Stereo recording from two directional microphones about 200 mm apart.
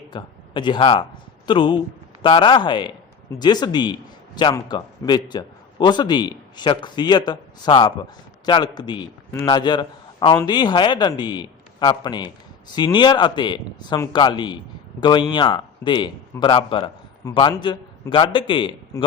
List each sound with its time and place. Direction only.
0.1 s a man's voice: 25° left (ahead or behind)